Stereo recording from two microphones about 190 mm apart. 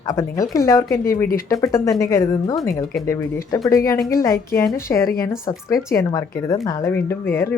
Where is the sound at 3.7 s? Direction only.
15° left (ahead or behind).